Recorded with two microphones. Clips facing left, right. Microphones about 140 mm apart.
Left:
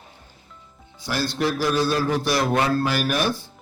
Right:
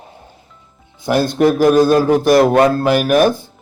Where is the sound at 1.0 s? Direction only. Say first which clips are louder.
Right 11 dB; 50° right (ahead or behind).